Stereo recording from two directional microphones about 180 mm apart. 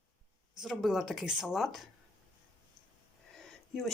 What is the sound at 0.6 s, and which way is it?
Speech, centre (ahead or behind).